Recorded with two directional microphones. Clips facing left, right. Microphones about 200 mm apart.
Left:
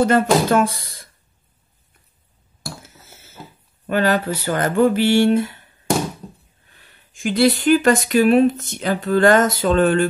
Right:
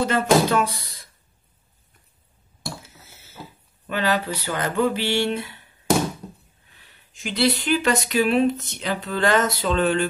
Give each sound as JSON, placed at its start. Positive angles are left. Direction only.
{"t": 0.0, "sound": "speech", "side_deg": 50}
{"t": 3.8, "sound": "speech", "side_deg": 50}
{"t": 7.2, "sound": "speech", "side_deg": 50}